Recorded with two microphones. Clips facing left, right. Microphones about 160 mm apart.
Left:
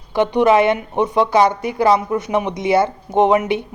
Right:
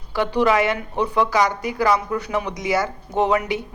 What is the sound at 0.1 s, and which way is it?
Speech, 20° left (ahead or behind).